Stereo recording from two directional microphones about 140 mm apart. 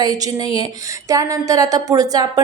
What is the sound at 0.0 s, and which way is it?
Speech, 30° right (ahead or behind).